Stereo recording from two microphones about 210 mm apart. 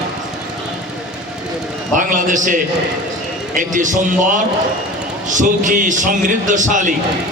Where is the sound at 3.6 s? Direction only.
35° right (ahead or behind).